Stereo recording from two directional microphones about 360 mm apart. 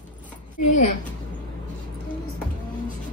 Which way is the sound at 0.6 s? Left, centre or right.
Left.